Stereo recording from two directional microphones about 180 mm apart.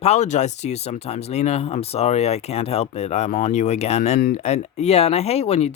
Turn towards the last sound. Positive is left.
turn(degrees=35)  # may be behind; listen again after turning